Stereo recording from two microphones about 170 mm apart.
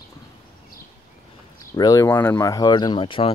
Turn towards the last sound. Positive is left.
turn(degrees=30)  # may be behind; listen again after turning